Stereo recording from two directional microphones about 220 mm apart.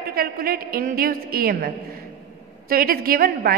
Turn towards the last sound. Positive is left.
turn(degrees=-40)  # may be behind; listen again after turning